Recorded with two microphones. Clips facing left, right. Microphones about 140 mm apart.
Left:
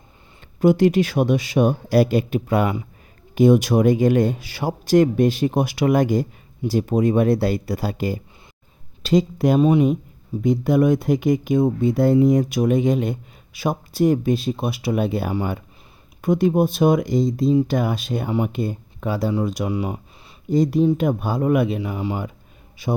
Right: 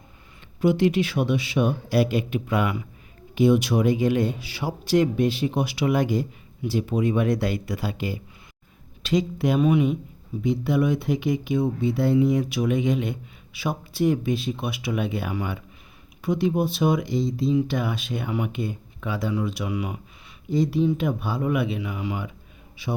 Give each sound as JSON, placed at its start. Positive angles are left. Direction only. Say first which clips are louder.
{"t": 0.6, "sound": "speech", "louder": "left 5 dB", "side_deg": 45}